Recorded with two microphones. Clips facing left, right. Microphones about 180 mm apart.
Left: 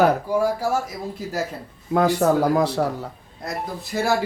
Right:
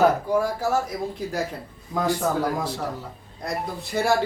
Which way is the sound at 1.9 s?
65° left (ahead or behind).